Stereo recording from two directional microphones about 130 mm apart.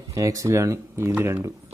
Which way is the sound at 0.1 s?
25° right (ahead or behind).